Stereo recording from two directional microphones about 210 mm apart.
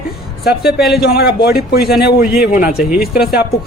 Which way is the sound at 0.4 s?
50° left (ahead or behind).